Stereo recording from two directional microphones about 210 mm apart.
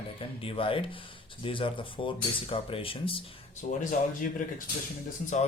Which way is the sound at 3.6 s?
40° left (ahead or behind).